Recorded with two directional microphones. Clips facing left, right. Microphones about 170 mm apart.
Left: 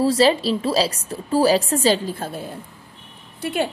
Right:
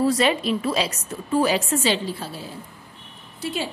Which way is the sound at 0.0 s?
30° left (ahead or behind).